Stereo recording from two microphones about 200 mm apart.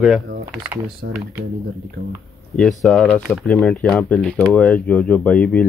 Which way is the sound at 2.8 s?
Centre (ahead or behind).